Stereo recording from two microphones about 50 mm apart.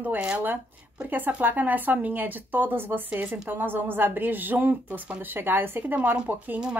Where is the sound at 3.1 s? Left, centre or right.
Right.